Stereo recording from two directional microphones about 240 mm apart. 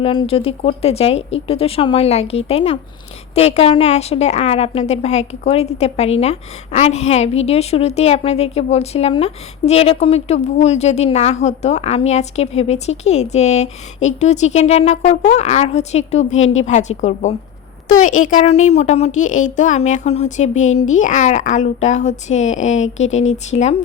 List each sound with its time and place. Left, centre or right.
0.0 s a woman's voice: left